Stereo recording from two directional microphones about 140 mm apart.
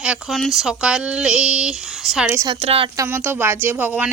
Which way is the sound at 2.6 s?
45° right (ahead or behind).